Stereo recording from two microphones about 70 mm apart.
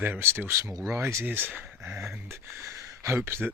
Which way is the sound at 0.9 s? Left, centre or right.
Right.